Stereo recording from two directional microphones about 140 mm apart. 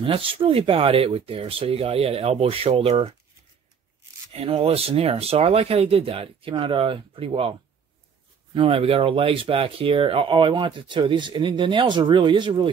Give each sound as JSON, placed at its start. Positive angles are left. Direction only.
{"t": 0.0, "sound": "speech", "side_deg": -40}
{"t": 4.3, "sound": "speech", "side_deg": -45}
{"t": 8.5, "sound": "speech", "side_deg": -40}